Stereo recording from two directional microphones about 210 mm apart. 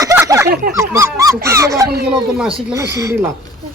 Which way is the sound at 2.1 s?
5° right (ahead or behind).